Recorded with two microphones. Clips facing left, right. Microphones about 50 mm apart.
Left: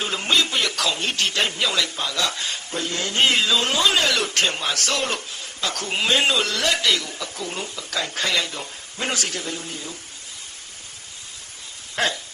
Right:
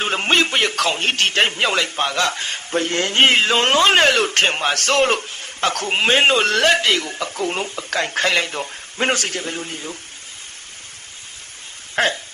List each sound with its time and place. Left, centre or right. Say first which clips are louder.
0.0 s a man's voice: right 4 dB; right
12.0 s speech: right 4 dB; right